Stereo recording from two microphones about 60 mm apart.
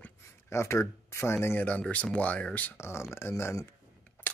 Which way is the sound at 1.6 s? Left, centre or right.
Left.